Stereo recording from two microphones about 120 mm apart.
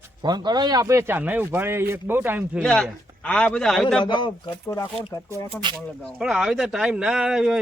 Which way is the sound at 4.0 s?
40° left (ahead or behind).